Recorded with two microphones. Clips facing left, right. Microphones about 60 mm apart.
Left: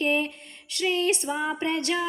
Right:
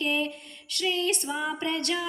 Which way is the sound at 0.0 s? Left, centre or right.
Left.